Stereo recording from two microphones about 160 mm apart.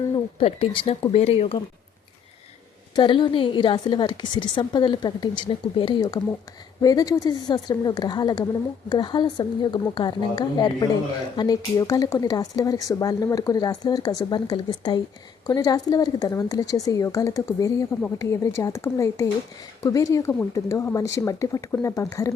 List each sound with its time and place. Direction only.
0.3 s speech: 35° left (ahead or behind)
2.9 s speech: 30° left (ahead or behind)